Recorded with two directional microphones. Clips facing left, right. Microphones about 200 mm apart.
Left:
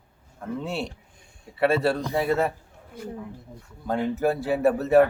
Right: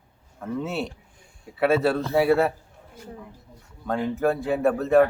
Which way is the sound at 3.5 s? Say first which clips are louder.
Left 6 dB; 50° left (ahead or behind).